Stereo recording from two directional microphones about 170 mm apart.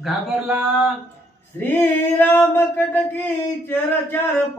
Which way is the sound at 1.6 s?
10° left (ahead or behind).